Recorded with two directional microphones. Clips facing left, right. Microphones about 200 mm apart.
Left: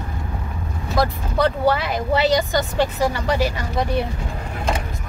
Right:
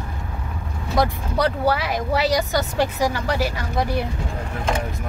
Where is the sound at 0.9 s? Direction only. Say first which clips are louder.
Even; 10° right (ahead or behind).